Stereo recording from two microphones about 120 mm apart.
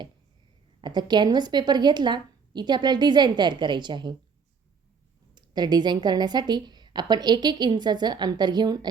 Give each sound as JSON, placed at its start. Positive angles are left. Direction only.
{"t": 0.8, "sound": "a woman's voice", "side_deg": -40}
{"t": 5.3, "sound": "a woman's voice", "side_deg": -35}